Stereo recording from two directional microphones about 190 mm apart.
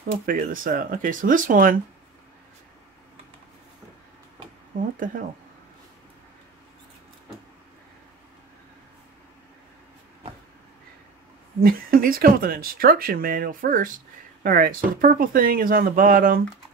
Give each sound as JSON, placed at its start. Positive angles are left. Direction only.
{"t": 0.3, "sound": "speech", "side_deg": -45}
{"t": 11.6, "sound": "speech", "side_deg": -50}